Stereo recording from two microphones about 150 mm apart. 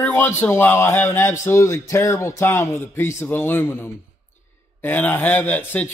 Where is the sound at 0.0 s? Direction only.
15° left (ahead or behind).